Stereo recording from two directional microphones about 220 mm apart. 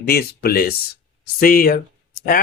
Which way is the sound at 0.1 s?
45° left (ahead or behind).